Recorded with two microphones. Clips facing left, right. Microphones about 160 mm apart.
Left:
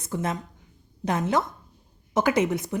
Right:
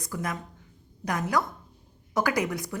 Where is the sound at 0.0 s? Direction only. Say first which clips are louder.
Left 4 dB; 25° left (ahead or behind).